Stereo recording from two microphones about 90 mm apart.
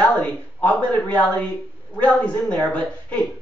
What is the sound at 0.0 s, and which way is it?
Speech, 15° left (ahead or behind).